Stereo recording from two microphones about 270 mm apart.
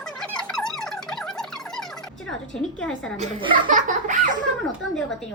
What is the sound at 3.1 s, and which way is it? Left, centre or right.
Speech, right.